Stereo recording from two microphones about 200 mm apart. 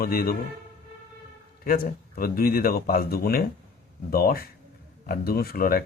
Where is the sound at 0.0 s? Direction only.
50° left (ahead or behind).